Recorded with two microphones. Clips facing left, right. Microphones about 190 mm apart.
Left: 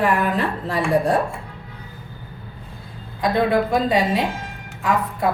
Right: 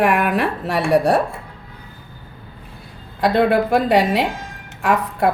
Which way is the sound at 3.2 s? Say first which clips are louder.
Right 3 dB; 70° right (ahead or behind).